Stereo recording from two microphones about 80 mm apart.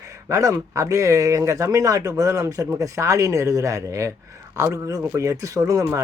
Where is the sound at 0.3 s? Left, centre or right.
Right.